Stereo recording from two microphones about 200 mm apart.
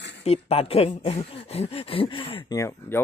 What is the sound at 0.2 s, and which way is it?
Speech, 30° left (ahead or behind).